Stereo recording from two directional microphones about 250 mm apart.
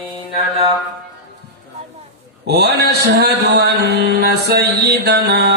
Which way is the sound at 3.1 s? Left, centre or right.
Right.